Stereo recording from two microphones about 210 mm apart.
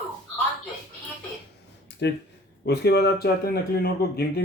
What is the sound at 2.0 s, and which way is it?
Speech, 55° left (ahead or behind).